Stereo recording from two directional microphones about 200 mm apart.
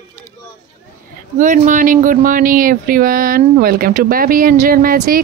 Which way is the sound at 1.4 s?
40° right (ahead or behind).